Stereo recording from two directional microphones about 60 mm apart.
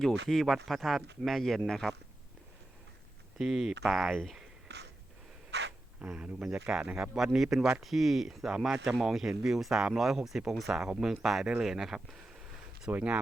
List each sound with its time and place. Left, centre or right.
0.0 s speech: centre
3.3 s speech: centre
6.1 s speech: centre
7.1 s speech: centre
12.9 s speech: right